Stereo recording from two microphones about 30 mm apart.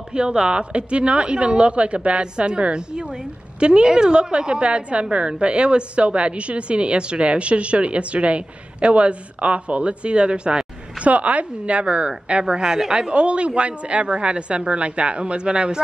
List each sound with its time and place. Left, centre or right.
0.1 s a woman's voice: right
11.0 s a woman's voice: right
12.6 s a woman's voice: right
13.1 s a woman's voice: right